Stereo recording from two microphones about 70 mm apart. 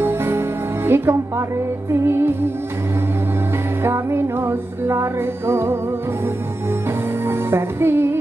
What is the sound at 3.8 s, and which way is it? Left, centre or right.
Music, right.